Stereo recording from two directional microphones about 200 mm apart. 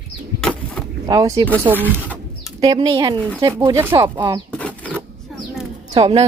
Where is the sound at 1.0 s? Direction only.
15° right (ahead or behind).